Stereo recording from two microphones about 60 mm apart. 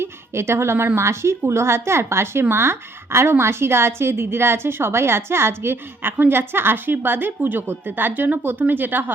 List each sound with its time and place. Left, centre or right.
0.0 s speech: right